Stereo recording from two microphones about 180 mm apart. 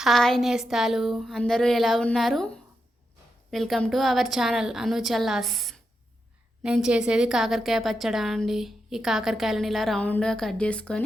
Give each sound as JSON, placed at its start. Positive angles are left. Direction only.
{"t": 0.0, "sound": "a woman's voice", "side_deg": 0}
{"t": 3.5, "sound": "a woman's voice", "side_deg": 0}